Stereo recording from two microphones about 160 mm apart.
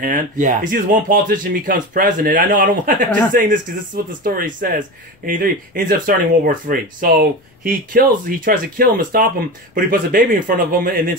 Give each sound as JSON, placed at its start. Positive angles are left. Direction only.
{"t": 0.0, "sound": "speech", "side_deg": -55}